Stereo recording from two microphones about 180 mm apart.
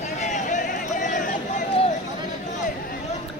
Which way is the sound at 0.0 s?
40° left (ahead or behind).